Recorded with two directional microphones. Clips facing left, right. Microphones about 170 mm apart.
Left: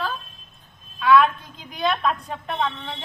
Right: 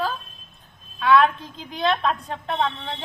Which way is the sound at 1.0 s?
25° right (ahead or behind).